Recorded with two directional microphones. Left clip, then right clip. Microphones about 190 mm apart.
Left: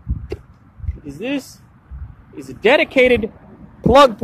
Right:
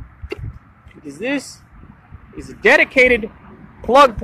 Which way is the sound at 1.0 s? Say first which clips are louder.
Right 2 dB; 5° right (ahead or behind).